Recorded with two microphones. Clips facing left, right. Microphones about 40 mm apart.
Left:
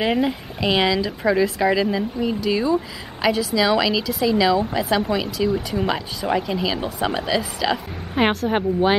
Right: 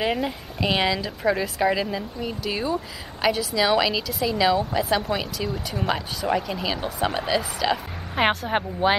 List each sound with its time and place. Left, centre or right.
0.0 s speech: centre
0.6 s a woman's voice: centre
2.5 s speech: centre
3.2 s a woman's voice: centre
5.5 s speech: centre
7.2 s a woman's voice: centre